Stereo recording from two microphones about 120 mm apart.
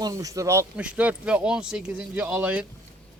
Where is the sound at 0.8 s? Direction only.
10° right (ahead or behind).